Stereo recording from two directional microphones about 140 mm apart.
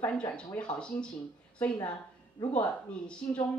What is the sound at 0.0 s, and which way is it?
Speech, 10° left (ahead or behind).